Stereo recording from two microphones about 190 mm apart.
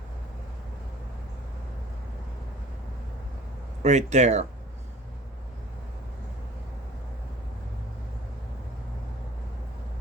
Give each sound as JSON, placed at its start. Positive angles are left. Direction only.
{"t": 3.8, "sound": "speech", "side_deg": -35}